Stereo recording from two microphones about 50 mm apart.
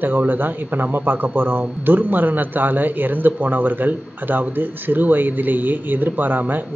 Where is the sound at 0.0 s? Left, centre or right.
Right.